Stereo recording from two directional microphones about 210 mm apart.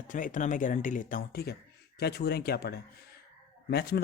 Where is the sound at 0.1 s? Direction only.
40° left (ahead or behind).